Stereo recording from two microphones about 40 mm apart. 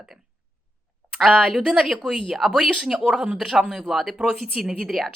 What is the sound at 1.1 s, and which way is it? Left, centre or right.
Speech, centre.